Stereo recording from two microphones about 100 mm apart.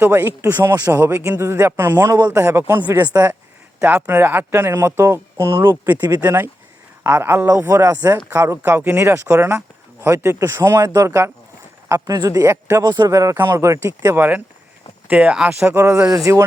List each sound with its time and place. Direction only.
0.0 s speech: 25° right (ahead or behind)
4.1 s speech: 20° right (ahead or behind)
8.3 s speech: 20° right (ahead or behind)
14.2 s speech: 15° right (ahead or behind)
15.6 s speech: 30° right (ahead or behind)